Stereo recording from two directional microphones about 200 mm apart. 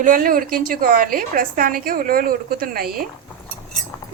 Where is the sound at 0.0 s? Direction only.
45° right (ahead or behind).